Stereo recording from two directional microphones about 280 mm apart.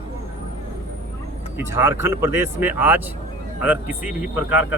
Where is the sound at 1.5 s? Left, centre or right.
Centre.